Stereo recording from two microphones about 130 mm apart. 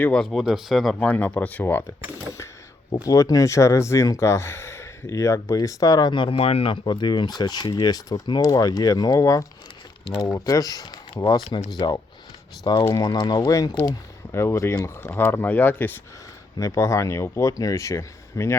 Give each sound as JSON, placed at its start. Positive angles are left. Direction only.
{"t": 0.0, "sound": "speech", "side_deg": 5}
{"t": 2.9, "sound": "speech", "side_deg": 25}
{"t": 6.8, "sound": "speech", "side_deg": 35}
{"t": 12.9, "sound": "speech", "side_deg": 30}
{"t": 16.6, "sound": "speech", "side_deg": 25}